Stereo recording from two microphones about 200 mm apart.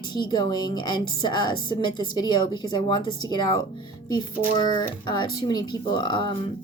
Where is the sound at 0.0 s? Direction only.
20° left (ahead or behind).